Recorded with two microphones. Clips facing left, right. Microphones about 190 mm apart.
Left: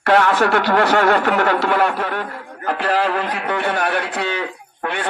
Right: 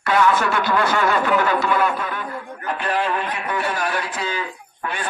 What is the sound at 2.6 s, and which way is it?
Speech, 80° left.